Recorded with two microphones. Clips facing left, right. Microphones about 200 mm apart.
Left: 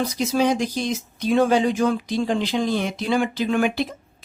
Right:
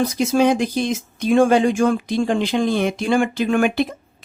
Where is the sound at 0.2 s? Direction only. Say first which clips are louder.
Right 3 dB; 55° right (ahead or behind).